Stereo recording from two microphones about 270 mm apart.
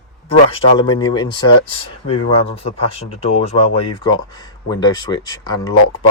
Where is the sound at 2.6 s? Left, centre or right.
Left.